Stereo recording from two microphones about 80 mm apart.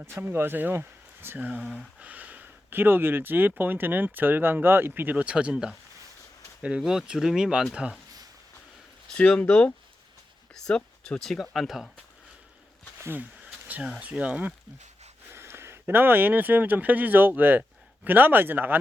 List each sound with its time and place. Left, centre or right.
0.0 s speech: right; by 7.9 s centre
9.1 s speech: centre
13.0 s speech: right
14.0 s speech: centre
15.3 s speech: right